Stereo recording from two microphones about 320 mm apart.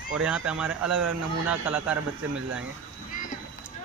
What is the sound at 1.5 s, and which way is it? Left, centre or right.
Speech, centre.